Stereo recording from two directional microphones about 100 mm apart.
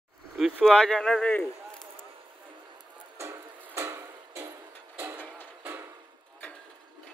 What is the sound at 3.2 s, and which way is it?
Music, 30° right (ahead or behind).